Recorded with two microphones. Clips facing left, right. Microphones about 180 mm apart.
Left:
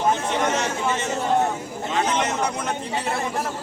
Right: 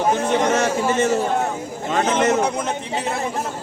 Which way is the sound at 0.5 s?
50° right (ahead or behind).